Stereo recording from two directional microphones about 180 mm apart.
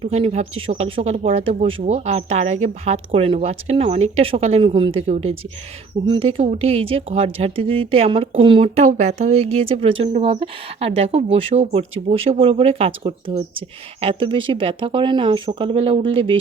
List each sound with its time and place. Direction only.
0.0 s speech: 35° right (ahead or behind)
5.0 s speech: 40° right (ahead or behind)